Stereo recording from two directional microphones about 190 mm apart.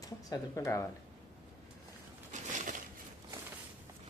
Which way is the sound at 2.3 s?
40° right (ahead or behind).